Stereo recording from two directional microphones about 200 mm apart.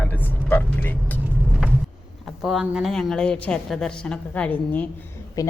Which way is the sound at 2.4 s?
Centre (ahead or behind).